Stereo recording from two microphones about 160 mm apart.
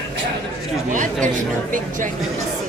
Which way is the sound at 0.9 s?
55° right (ahead or behind).